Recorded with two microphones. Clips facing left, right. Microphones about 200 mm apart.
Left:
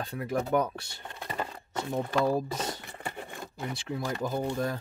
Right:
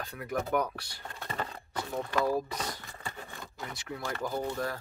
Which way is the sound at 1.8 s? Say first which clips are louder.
Left 3 dB; 25° left (ahead or behind).